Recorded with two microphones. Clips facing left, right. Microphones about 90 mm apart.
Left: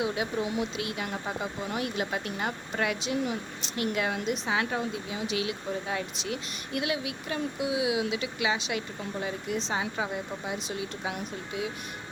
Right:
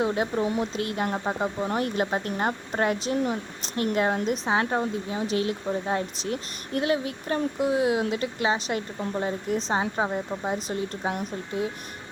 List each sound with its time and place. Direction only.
0.0 s speech: 40° right (ahead or behind)